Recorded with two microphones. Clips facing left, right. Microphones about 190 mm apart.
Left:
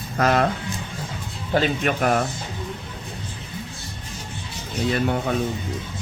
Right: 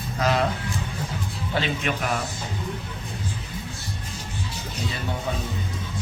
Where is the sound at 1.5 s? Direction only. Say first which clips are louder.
Left 6 dB; 45° left (ahead or behind).